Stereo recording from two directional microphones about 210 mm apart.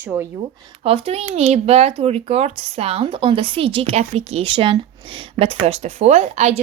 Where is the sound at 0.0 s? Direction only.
10° right (ahead or behind).